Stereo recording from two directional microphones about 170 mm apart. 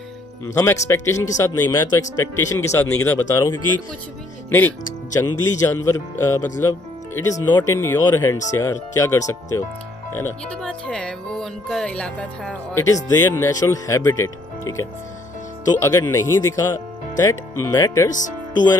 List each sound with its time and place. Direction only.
0.4 s speech: 15° left (ahead or behind)
5.1 s speech: 20° left (ahead or behind)
10.6 s music: 5° left (ahead or behind)
13.1 s speech: 15° left (ahead or behind)
18.1 s speech: 50° left (ahead or behind)